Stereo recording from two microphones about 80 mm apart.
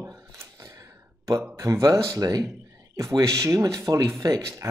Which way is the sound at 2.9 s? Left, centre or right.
Right.